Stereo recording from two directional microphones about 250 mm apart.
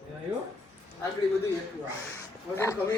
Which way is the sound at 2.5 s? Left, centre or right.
Centre.